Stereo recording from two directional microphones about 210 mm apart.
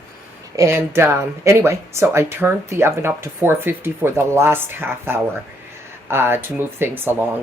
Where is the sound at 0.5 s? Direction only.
15° right (ahead or behind).